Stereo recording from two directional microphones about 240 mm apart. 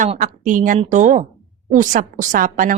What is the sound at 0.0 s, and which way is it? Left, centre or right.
A woman's voice, right.